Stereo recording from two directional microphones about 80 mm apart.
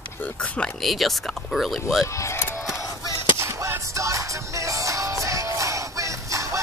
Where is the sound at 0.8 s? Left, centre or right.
Centre.